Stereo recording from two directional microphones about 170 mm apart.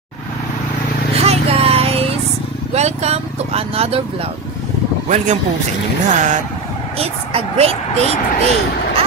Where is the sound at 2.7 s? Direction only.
40° right (ahead or behind).